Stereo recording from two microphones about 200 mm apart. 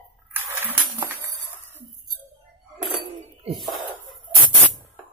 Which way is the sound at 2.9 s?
30° right (ahead or behind).